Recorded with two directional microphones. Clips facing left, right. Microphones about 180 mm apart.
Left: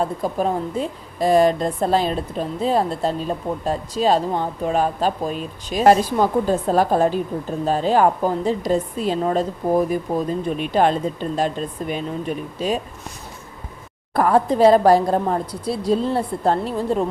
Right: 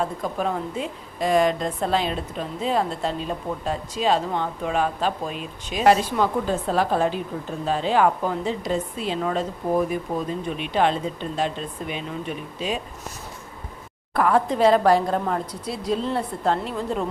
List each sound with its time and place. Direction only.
0.0 s a woman's voice: 35° left (ahead or behind)
14.1 s a woman's voice: 35° left (ahead or behind)